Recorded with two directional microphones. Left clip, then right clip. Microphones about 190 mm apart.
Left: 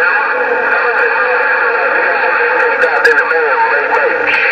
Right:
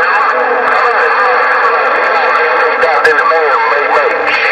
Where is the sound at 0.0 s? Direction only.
45° right (ahead or behind).